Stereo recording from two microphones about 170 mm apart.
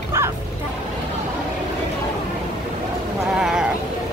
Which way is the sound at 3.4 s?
5° right (ahead or behind).